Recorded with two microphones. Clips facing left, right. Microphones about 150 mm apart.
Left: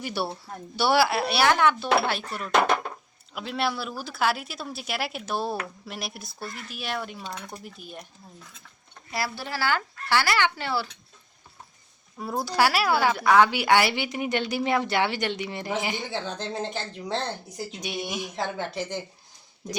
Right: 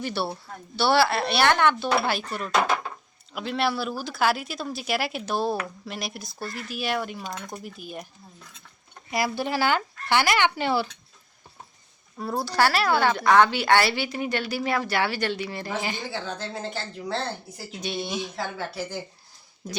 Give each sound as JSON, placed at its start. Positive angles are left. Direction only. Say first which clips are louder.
{"t": 0.0, "sound": "a woman's voice", "louder": "right 1 dB", "side_deg": 10}
{"t": 9.0, "sound": "speech", "louder": "right 5 dB", "side_deg": -15}
{"t": 12.2, "sound": "a woman's voice", "louder": "even", "side_deg": 10}